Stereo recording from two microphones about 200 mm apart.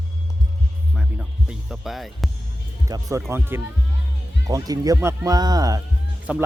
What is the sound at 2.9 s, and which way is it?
Speech, 15° right (ahead or behind).